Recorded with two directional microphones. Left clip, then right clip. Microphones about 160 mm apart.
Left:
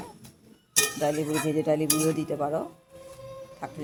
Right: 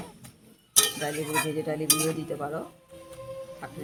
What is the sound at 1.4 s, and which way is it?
Cutlery, 30° left (ahead or behind).